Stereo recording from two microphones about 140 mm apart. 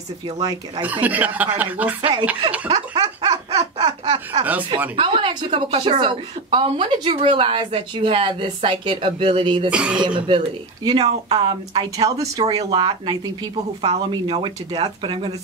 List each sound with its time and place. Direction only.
0.4 s speech: 25° right (ahead or behind)
0.8 s speech: 10° right (ahead or behind)
2.0 s speech: 40° right (ahead or behind)
2.7 s dog: 30° right (ahead or behind)
3.7 s a sound: 35° right (ahead or behind)
4.9 s a woman's voice: 40° right (ahead or behind)
9.7 s speech: 10° right (ahead or behind)
10.2 s a woman's voice: 35° right (ahead or behind)
14.2 s a woman's voice: 35° right (ahead or behind)